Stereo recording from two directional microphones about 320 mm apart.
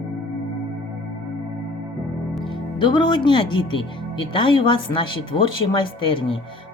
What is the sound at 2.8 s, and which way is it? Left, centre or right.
Speech, centre.